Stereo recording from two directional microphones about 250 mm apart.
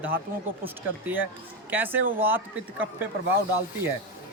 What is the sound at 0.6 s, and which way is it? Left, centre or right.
A man's voice, centre.